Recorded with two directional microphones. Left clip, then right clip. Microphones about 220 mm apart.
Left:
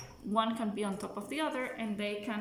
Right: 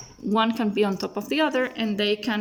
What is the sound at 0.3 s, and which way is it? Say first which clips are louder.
A woman's voice: right 9 dB; 40° right (ahead or behind).